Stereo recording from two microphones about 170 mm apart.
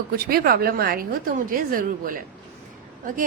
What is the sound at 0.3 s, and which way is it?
A woman's voice, 60° right (ahead or behind).